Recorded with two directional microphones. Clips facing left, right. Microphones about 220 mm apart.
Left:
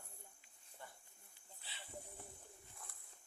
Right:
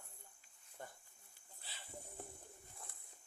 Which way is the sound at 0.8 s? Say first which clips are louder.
Right 4 dB; 45° right (ahead or behind).